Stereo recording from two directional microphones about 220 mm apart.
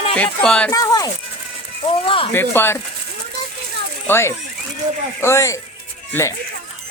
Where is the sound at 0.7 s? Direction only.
15° left (ahead or behind).